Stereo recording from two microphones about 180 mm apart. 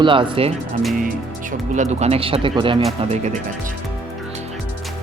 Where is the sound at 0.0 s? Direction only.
30° right (ahead or behind).